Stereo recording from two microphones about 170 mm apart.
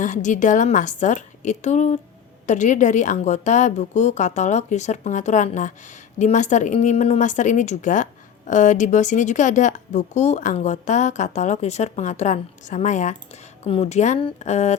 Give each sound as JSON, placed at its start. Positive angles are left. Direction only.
{"t": 0.0, "sound": "a woman's voice", "side_deg": 45}